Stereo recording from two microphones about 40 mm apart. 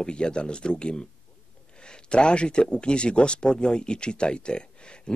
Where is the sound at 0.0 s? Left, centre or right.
Left.